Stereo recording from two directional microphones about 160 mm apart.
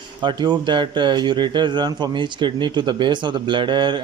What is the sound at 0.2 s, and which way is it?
Speech, 30° right (ahead or behind).